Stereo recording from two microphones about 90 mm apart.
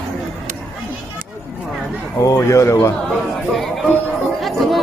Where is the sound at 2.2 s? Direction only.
35° left (ahead or behind).